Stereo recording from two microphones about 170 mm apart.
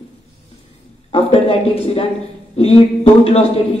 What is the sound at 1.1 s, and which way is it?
Speech, 40° left (ahead or behind).